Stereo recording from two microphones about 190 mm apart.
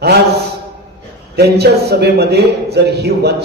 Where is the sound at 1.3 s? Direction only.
60° right (ahead or behind).